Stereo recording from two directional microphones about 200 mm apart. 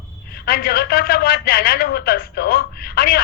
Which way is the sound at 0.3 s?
50° left (ahead or behind).